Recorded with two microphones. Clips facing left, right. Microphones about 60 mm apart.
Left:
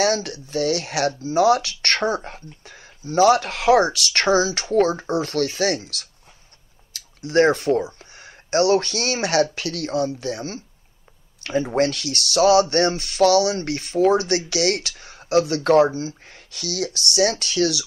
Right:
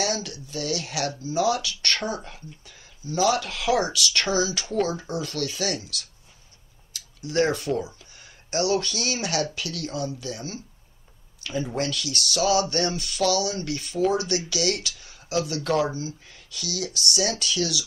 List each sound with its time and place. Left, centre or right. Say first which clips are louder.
0.0 s speech: left 7 dB; left
6.9 s a sound: left 7 dB; left
8.0 s speech: left 6 dB; left